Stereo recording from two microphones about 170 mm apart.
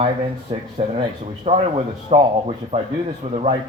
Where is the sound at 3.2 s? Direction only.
45° right (ahead or behind).